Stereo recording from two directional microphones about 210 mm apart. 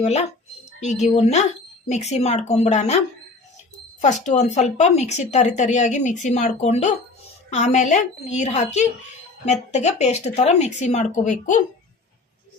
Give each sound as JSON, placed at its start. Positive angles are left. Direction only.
{"t": 0.0, "sound": "speech", "side_deg": 30}
{"t": 4.3, "sound": "speech", "side_deg": 35}